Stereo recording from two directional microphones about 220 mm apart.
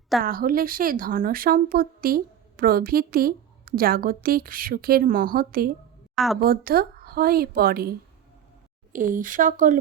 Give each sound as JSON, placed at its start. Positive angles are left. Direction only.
{"t": 0.2, "sound": "speech", "side_deg": -40}
{"t": 6.1, "sound": "a woman's voice", "side_deg": 0}
{"t": 6.4, "sound": "a woman's voice", "side_deg": -45}